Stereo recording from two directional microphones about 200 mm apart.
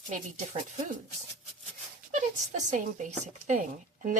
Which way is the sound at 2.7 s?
35° right (ahead or behind).